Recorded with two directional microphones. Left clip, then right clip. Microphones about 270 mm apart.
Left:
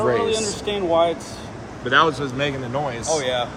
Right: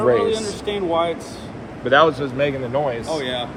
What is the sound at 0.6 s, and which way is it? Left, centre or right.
Speech, left.